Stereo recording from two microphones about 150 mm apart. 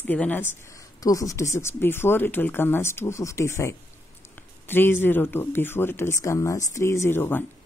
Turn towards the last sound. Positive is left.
turn(degrees=15)  # may be behind; listen again after turning